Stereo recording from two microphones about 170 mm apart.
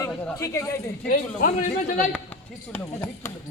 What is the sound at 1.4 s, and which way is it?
Speech, 50° left (ahead or behind).